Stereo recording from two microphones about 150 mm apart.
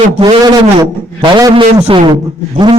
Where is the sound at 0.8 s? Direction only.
25° right (ahead or behind).